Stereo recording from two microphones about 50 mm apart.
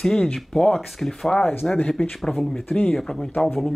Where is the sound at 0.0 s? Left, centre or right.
Centre.